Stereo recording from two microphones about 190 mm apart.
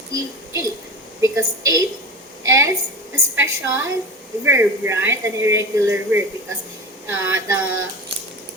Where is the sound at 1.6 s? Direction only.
20° right (ahead or behind).